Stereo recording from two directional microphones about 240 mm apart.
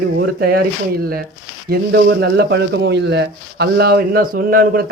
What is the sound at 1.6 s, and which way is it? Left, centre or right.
Speech, right.